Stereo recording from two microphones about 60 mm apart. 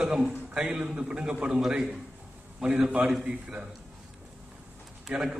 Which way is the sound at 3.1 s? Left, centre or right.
Centre.